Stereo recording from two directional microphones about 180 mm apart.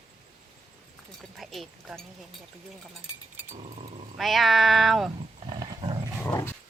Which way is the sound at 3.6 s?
35° right (ahead or behind).